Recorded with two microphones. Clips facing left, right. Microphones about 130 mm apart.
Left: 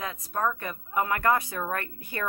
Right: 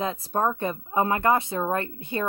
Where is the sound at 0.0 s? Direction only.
30° right (ahead or behind).